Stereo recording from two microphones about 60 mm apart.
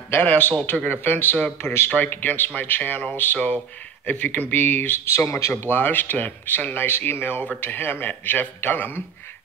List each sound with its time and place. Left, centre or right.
0.2 s a man's voice: left
2.0 s speech: left
5.1 s speech: left
5.5 s speech: left